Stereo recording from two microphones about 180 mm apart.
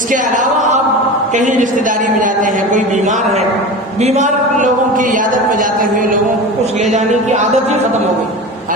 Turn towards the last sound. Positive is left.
turn(degrees=-40)  # may be behind; listen again after turning